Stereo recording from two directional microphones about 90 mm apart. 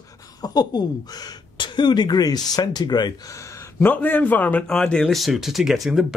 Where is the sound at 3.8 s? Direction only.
20° left (ahead or behind).